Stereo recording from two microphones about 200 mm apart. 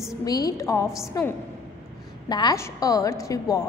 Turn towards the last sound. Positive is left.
turn(degrees=15)  # may be behind; listen again after turning